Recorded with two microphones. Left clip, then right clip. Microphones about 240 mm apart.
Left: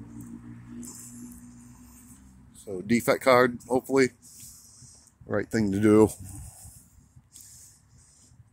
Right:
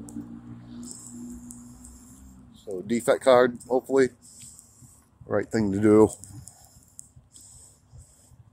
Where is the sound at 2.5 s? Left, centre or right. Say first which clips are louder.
Left 1 dB; left.